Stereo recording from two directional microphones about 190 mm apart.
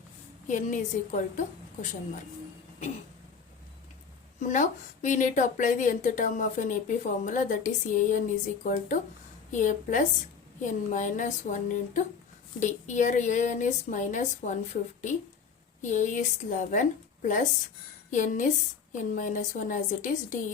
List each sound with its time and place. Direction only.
0.4 s speech: 40° left (ahead or behind)
4.4 s a woman's voice: 40° left (ahead or behind)
15.8 s a woman's voice: 40° left (ahead or behind)